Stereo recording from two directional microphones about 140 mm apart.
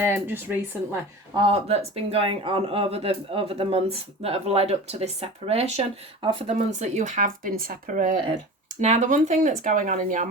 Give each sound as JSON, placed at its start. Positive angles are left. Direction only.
{"t": 0.0, "sound": "speech", "side_deg": -15}
{"t": 1.3, "sound": "speech", "side_deg": -40}